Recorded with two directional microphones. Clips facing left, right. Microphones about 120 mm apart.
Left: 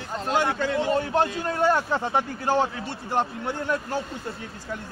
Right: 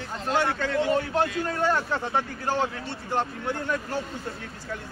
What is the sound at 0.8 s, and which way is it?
A man's voice, 25° left (ahead or behind).